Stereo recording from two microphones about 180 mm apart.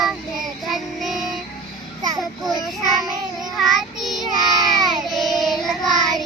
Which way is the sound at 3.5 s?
Centre (ahead or behind).